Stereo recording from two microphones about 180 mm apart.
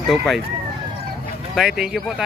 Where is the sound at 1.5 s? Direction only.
Centre (ahead or behind).